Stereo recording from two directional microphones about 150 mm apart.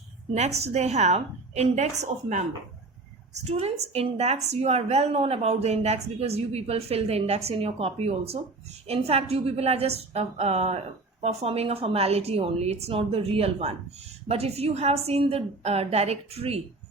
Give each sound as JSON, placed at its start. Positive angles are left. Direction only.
{"t": 0.3, "sound": "a woman's voice", "side_deg": -45}